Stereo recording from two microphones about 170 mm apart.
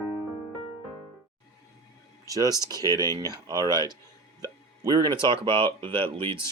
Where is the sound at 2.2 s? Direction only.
20° right (ahead or behind).